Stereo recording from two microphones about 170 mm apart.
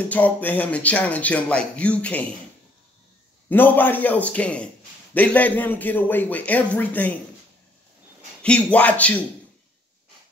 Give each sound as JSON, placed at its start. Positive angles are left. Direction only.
{"t": 0.1, "sound": "speech", "side_deg": 10}
{"t": 3.4, "sound": "speech", "side_deg": 10}
{"t": 8.4, "sound": "speech", "side_deg": 10}